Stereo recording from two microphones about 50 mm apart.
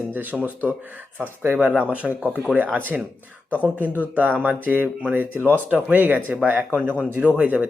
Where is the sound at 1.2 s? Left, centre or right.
Right.